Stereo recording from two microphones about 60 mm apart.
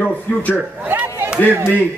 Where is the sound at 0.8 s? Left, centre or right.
Right.